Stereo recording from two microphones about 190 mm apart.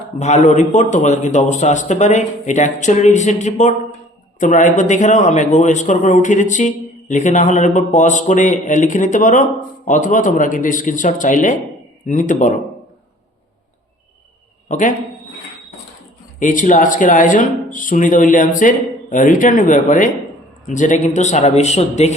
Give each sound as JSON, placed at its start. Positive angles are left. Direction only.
{"t": 0.2, "sound": "a man's voice", "side_deg": 40}
{"t": 14.7, "sound": "a man's voice", "side_deg": 45}
{"t": 16.4, "sound": "a man's voice", "side_deg": 45}